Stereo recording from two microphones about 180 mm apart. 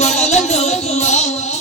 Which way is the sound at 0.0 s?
40° left (ahead or behind).